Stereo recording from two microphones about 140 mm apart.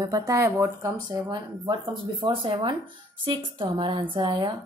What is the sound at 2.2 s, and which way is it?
A woman's voice, 40° right (ahead or behind).